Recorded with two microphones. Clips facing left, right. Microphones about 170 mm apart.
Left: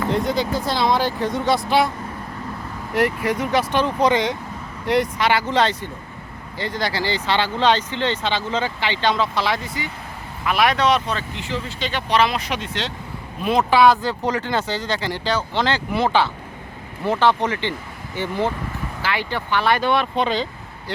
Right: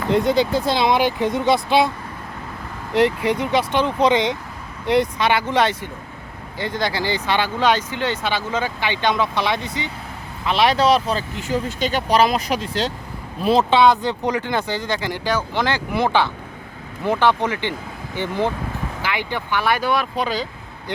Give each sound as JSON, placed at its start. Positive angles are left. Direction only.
{"t": 0.1, "sound": "speech", "side_deg": -25}
{"t": 2.9, "sound": "speech", "side_deg": -20}